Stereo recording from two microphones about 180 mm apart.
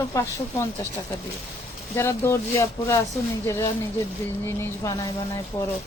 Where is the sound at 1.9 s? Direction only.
15° left (ahead or behind).